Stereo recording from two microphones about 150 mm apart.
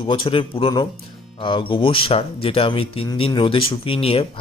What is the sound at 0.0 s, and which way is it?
Speech, 35° left (ahead or behind).